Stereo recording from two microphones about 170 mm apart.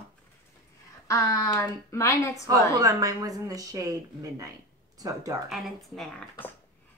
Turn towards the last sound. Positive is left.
turn(degrees=5)  # may be behind; listen again after turning